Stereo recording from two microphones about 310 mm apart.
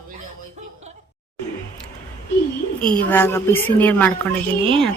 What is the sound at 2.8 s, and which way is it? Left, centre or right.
A woman's voice, centre.